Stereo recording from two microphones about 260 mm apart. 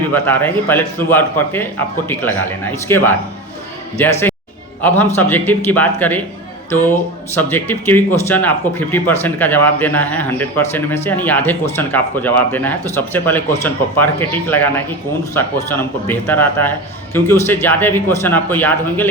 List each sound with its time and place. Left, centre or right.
0.1 s speech: centre
7.3 s speech: centre